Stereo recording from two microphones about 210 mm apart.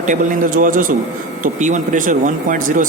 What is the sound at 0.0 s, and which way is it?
Speech, 40° right (ahead or behind).